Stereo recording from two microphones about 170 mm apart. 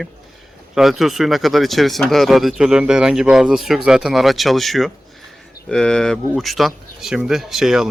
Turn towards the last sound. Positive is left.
turn(degrees=0)  # may be behind; listen again after turning